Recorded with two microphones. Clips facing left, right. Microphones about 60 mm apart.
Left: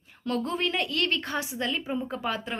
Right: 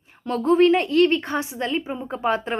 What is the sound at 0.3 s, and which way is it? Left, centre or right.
A woman's voice, right.